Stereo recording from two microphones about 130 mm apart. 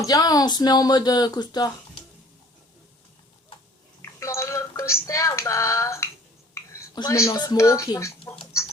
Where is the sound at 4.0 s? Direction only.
20° left (ahead or behind).